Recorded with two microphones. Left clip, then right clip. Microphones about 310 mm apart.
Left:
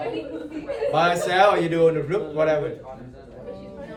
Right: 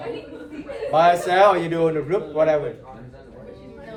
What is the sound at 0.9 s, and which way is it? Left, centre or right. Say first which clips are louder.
A man's voice: right 4 dB; right.